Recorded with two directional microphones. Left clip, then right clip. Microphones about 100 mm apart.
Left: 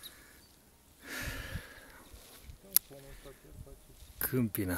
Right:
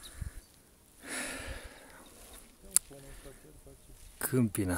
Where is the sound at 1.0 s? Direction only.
35° right (ahead or behind).